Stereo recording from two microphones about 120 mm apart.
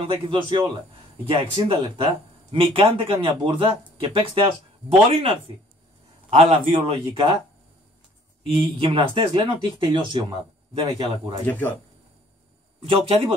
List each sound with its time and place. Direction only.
0.0 s speech: 45° right (ahead or behind)
8.5 s speech: 50° right (ahead or behind)
11.4 s speech: 15° left (ahead or behind)
12.8 s speech: 50° right (ahead or behind)